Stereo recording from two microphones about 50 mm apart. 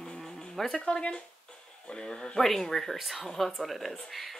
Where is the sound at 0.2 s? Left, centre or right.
Centre.